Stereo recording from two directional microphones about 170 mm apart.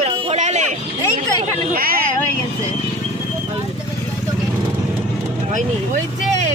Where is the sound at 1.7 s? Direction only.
60° right (ahead or behind).